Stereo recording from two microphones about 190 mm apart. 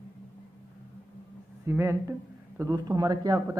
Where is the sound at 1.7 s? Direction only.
15° right (ahead or behind).